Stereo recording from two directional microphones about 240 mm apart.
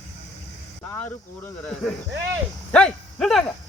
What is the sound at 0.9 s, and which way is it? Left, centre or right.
Speech, centre.